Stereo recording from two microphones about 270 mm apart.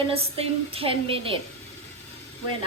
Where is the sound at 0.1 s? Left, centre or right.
Right.